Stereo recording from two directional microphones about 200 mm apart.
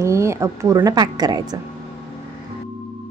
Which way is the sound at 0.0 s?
15° right (ahead or behind).